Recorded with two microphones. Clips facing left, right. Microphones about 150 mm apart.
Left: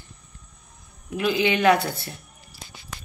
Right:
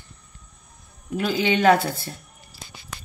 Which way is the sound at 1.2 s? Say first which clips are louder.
Even; 35° right (ahead or behind).